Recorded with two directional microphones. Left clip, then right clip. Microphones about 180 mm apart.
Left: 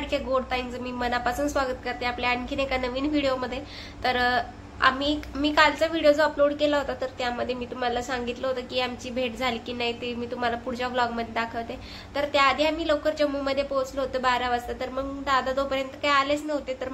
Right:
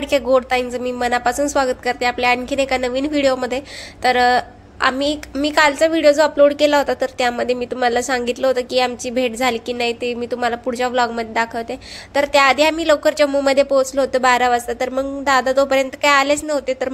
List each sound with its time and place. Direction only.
0.1 s a woman's voice: 45° right (ahead or behind)